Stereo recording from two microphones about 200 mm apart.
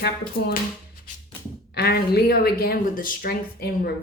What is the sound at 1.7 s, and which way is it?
Speech, 55° left (ahead or behind).